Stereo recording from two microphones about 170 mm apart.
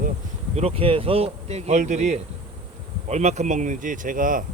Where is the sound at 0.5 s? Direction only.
35° right (ahead or behind).